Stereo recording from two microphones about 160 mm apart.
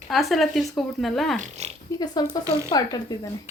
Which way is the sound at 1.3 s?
45° right (ahead or behind).